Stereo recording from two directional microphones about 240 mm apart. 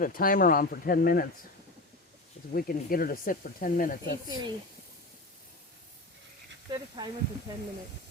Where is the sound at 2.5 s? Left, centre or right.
Left.